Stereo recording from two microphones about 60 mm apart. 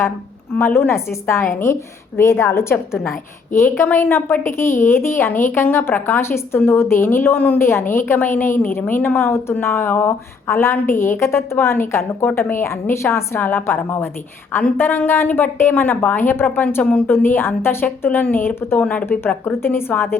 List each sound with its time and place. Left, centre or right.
0.6 s a woman's voice: left
7.6 s a woman's voice: left
10.5 s a woman's voice: left
17.8 s a woman's voice: left
18.8 s a woman's voice: left
19.5 s a woman's voice: left